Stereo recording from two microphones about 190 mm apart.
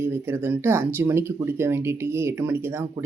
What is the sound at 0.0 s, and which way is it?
Speech, 10° right (ahead or behind).